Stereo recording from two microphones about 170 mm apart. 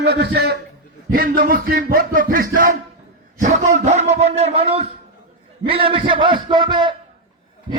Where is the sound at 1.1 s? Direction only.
60° right (ahead or behind).